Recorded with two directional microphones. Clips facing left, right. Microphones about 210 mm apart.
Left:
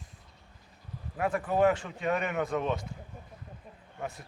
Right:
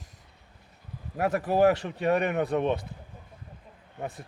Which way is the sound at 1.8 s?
40° right (ahead or behind).